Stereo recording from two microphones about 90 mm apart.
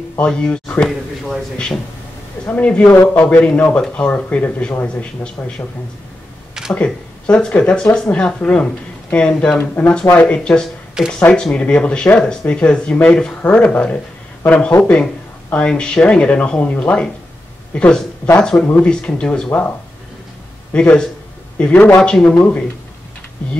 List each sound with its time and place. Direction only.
0.2 s speech: 10° left (ahead or behind)
2.4 s speech: 15° left (ahead or behind)
6.7 s speech: 15° left (ahead or behind)
20.7 s speech: 10° left (ahead or behind)